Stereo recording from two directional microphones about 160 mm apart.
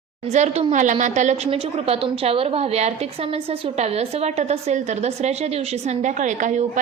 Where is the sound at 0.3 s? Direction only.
45° right (ahead or behind).